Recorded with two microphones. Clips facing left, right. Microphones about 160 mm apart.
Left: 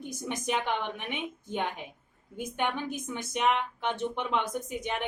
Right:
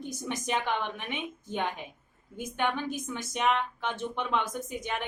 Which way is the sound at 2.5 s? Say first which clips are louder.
Right 1 dB; 15° left (ahead or behind).